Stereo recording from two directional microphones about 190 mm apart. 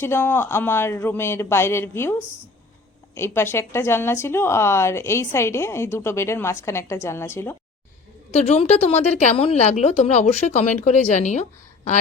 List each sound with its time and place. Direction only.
0.0 s speech: 10° left (ahead or behind)
3.2 s speech: 15° left (ahead or behind)
8.3 s a woman's voice: 35° left (ahead or behind)